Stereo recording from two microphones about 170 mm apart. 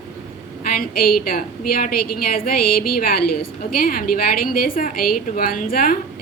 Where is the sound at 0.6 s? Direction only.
60° left (ahead or behind).